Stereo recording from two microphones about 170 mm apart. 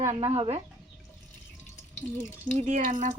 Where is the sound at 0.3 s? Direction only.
35° right (ahead or behind).